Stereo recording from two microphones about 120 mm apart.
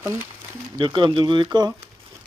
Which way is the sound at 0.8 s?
40° right (ahead or behind).